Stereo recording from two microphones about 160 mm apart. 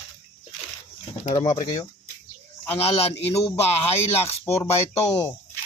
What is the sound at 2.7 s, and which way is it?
Speech, 40° left (ahead or behind).